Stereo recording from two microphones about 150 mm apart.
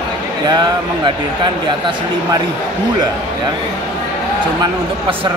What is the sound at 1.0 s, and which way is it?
Speech, 30° right (ahead or behind).